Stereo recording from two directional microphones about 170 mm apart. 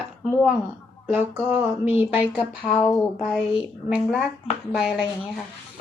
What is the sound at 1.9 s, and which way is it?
Speech, 35° left (ahead or behind).